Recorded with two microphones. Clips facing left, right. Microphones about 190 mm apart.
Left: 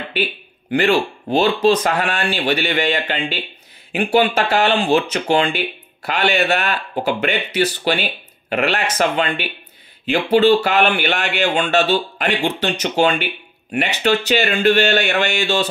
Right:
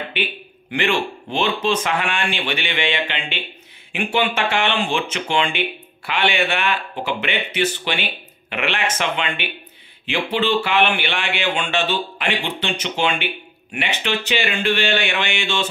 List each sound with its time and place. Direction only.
0.1 s speech: 40° left (ahead or behind)